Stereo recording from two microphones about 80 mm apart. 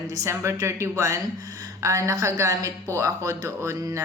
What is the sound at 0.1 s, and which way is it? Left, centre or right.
Speech, right.